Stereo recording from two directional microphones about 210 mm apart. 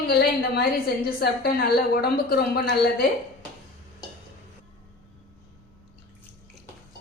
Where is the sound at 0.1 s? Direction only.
50° left (ahead or behind).